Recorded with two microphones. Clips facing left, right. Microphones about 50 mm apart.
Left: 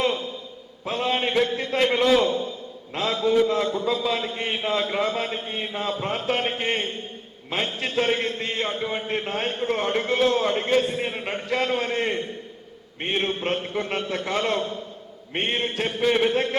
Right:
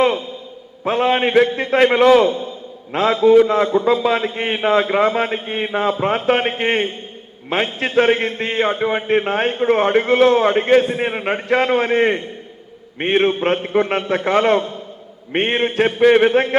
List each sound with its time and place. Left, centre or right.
0.9 s a man's voice: right
3.4 s a man's voice: right